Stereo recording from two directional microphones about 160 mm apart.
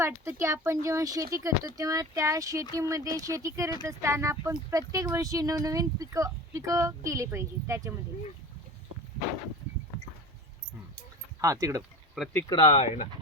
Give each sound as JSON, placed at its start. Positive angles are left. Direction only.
{"t": 0.0, "sound": "speech", "side_deg": -15}
{"t": 11.3, "sound": "speech", "side_deg": -20}
{"t": 12.5, "sound": "speech", "side_deg": 35}